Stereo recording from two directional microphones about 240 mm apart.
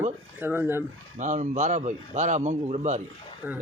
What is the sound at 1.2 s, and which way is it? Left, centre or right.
A man's voice, right.